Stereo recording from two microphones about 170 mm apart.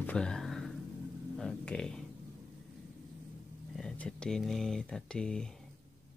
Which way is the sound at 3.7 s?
5° left (ahead or behind).